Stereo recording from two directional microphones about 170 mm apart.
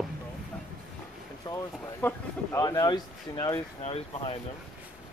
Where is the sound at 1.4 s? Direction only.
20° left (ahead or behind).